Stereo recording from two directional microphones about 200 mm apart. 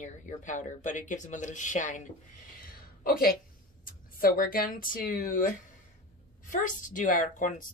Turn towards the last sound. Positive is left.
turn(degrees=40)  # may be behind; listen again after turning